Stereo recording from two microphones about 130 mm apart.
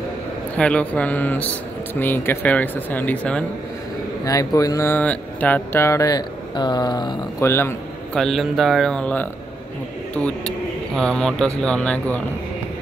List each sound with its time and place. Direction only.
0.6 s speech: 10° left (ahead or behind)
4.2 s speech: 25° left (ahead or behind)
7.4 s speech: 20° left (ahead or behind)
8.1 s speech: centre (ahead or behind)